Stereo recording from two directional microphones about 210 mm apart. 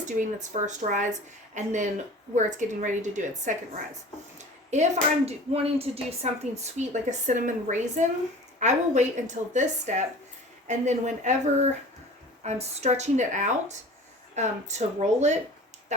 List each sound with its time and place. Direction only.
0.0 s a woman's voice: 35° right (ahead or behind)
4.7 s a woman's voice: 35° right (ahead or behind)